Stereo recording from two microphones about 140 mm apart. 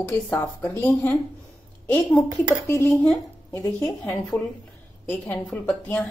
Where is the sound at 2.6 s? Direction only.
15° left (ahead or behind).